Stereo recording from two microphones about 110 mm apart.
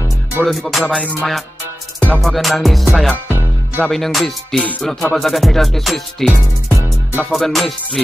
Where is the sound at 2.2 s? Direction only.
Centre (ahead or behind).